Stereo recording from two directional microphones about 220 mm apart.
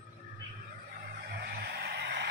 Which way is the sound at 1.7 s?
50° right (ahead or behind).